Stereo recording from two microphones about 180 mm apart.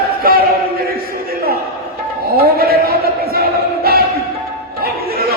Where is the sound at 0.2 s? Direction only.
55° right (ahead or behind).